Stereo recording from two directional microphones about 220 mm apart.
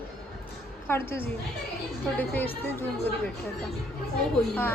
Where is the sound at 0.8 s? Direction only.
10° left (ahead or behind).